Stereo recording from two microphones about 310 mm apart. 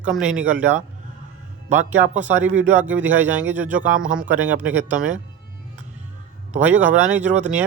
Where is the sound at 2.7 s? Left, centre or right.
Centre.